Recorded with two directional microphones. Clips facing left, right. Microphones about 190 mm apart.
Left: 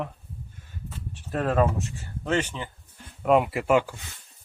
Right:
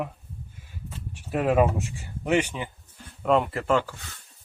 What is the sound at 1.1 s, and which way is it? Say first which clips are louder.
Speech: right 3 dB; 10° right (ahead or behind).